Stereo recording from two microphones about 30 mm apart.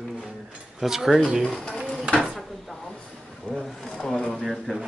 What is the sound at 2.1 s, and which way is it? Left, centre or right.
Drawer open or close, right.